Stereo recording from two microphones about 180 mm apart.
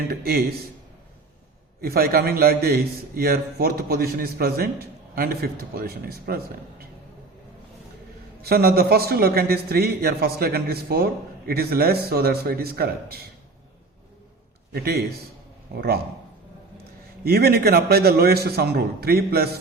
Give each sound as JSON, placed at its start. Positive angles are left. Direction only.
{"t": 0.1, "sound": "a man's voice", "side_deg": -55}
{"t": 1.8, "sound": "a man's voice", "side_deg": -60}
{"t": 8.4, "sound": "a man's voice", "side_deg": -60}
{"t": 14.7, "sound": "a man's voice", "side_deg": -60}
{"t": 17.2, "sound": "a man's voice", "side_deg": -60}